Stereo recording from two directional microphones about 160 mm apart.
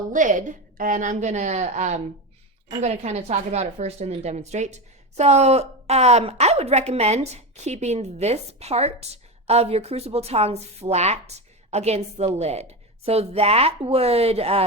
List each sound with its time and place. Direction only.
0.1 s a woman's voice: 55° right (ahead or behind)